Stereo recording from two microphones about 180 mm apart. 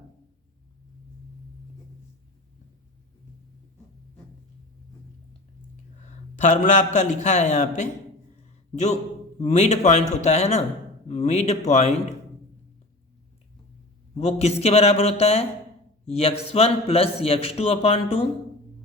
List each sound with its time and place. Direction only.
6.0 s a man's voice: 40° left (ahead or behind)
8.7 s a man's voice: 40° left (ahead or behind)
14.2 s a man's voice: 35° left (ahead or behind)